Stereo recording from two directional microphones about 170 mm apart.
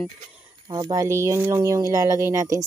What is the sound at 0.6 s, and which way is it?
Speech, 25° right (ahead or behind).